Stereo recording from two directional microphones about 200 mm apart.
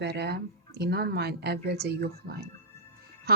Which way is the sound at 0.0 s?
55° right (ahead or behind).